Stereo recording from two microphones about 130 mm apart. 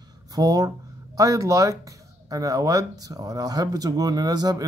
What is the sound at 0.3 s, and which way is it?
Speech, 30° right (ahead or behind).